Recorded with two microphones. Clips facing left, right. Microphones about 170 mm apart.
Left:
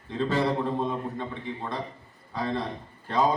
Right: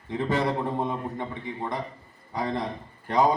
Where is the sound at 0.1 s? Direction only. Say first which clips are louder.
Even; 15° right (ahead or behind).